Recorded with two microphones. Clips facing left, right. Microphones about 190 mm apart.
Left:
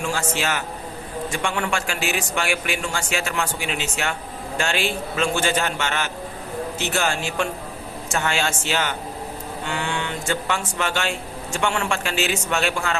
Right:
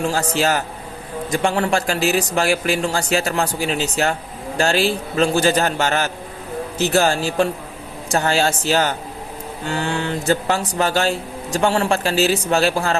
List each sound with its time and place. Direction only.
0.0 s speech: 35° right (ahead or behind)